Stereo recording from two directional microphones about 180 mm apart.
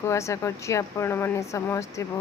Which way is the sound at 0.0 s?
15° left (ahead or behind).